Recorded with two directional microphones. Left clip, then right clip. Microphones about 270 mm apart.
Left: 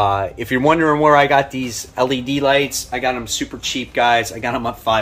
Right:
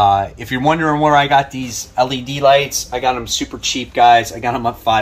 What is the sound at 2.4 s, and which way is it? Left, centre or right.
Speech, centre.